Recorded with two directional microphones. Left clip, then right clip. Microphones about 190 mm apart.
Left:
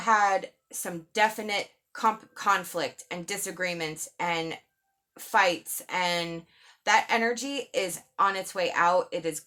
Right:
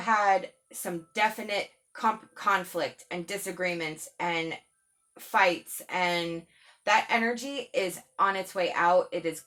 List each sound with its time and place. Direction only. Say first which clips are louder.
0.0 s speech: left 1 dB; 45° left (ahead or behind)